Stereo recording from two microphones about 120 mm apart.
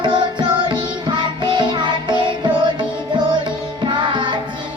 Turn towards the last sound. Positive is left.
turn(degrees=-40)  # may be behind; listen again after turning